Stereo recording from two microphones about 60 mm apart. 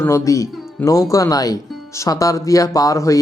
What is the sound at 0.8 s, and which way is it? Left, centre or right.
Speech, left.